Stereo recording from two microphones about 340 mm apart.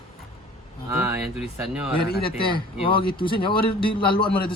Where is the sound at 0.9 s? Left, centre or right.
Centre.